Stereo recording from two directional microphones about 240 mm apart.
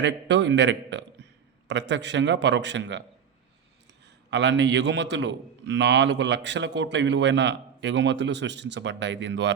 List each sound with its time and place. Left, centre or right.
0.0 s a man's voice: right
4.0 s a man's voice: right